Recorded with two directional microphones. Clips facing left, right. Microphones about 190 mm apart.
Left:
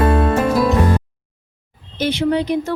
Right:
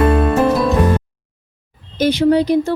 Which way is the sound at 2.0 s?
40° right (ahead or behind).